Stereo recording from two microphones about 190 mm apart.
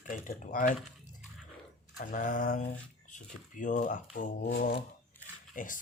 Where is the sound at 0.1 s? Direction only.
45° left (ahead or behind).